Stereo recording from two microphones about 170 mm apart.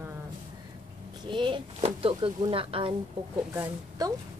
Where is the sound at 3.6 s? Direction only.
20° right (ahead or behind).